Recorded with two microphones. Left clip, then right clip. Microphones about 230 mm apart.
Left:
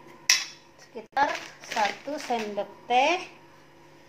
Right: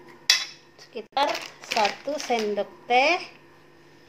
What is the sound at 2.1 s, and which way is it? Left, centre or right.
Speech, centre.